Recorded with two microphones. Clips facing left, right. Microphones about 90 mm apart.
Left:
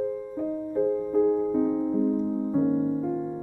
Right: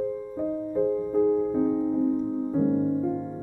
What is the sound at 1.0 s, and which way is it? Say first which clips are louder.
Music: even; centre (ahead or behind).